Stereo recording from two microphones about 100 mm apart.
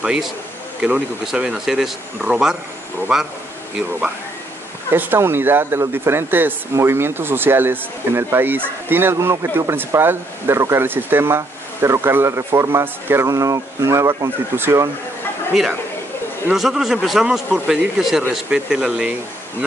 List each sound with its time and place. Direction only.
0.0 s speech: 5° right (ahead or behind)
4.9 s speech: 20° right (ahead or behind)
15.5 s a man's voice: centre (ahead or behind)